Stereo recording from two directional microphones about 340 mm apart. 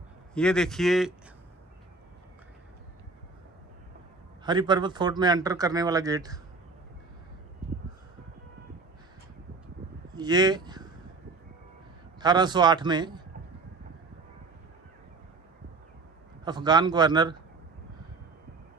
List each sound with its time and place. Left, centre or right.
0.3 s speech: centre
4.5 s speech: centre
10.1 s speech: centre
12.2 s speech: centre
16.4 s speech: centre